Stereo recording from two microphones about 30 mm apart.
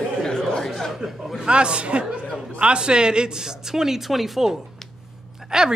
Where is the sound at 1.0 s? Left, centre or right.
Centre.